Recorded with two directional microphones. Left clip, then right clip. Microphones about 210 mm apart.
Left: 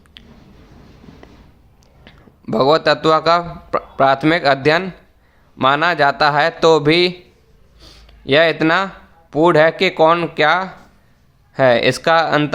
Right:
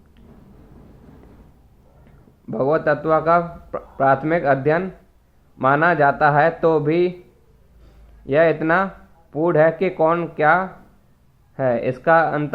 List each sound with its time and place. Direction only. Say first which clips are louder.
2.0 s a man's voice: left 8 dB; 35° left (ahead or behind)